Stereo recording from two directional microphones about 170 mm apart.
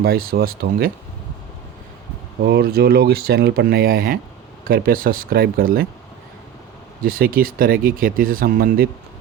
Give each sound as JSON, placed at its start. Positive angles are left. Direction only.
{"t": 0.0, "sound": "speech", "side_deg": -60}
{"t": 2.4, "sound": "speech", "side_deg": -65}
{"t": 7.0, "sound": "speech", "side_deg": -60}